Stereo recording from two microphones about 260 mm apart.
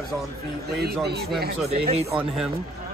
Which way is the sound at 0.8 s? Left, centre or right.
Right.